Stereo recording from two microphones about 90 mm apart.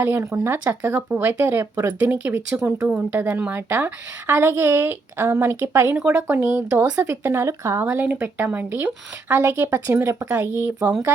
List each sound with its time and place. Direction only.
0.0 s speech: 30° right (ahead or behind)
7.8 s speech: 25° right (ahead or behind)